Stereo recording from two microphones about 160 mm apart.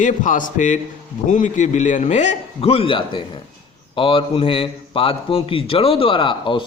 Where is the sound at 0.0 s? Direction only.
50° left (ahead or behind).